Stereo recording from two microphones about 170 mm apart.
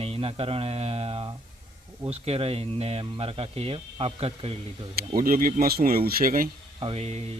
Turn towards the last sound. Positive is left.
turn(degrees=-40)  # may be behind; listen again after turning